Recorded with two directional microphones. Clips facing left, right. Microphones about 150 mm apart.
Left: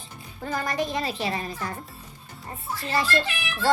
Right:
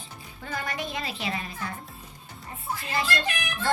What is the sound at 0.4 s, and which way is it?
A woman's voice, 40° left (ahead or behind).